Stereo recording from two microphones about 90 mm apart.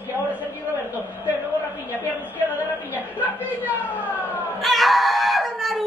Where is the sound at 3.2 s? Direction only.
20° left (ahead or behind).